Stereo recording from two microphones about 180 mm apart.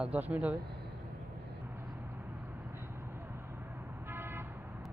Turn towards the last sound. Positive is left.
turn(degrees=-10)  # may be behind; listen again after turning